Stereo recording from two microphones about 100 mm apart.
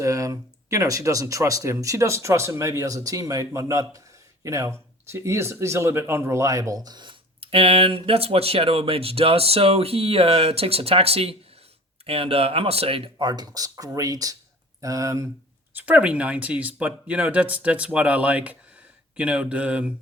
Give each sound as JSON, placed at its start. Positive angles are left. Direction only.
{"t": 0.0, "sound": "speech", "side_deg": -35}
{"t": 13.1, "sound": "speech", "side_deg": -45}
{"t": 15.7, "sound": "speech", "side_deg": -15}